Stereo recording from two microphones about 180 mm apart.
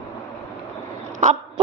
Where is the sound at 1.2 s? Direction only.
40° right (ahead or behind).